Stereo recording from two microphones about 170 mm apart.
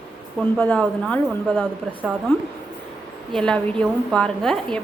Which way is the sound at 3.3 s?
5° left (ahead or behind).